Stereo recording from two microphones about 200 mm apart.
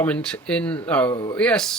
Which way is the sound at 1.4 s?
5° left (ahead or behind).